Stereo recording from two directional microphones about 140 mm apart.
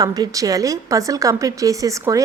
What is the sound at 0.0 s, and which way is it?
A woman's voice, 25° right (ahead or behind).